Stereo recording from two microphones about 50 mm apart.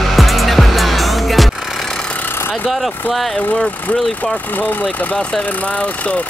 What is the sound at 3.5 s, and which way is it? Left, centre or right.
Speech, left.